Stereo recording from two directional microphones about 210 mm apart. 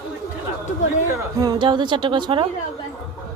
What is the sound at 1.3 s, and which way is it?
A woman's voice, 20° right (ahead or behind).